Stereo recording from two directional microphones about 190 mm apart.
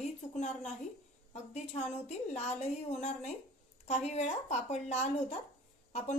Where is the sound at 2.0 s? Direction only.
35° left (ahead or behind).